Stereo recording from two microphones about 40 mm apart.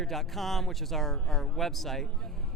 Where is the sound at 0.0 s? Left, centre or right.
Centre.